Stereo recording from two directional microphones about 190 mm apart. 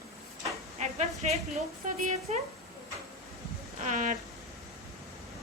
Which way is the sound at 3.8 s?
40° right (ahead or behind).